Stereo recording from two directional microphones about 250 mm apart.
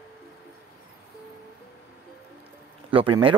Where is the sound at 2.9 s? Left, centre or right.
Right.